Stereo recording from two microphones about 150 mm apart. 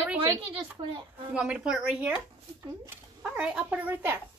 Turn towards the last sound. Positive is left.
turn(degrees=-15)  # may be behind; listen again after turning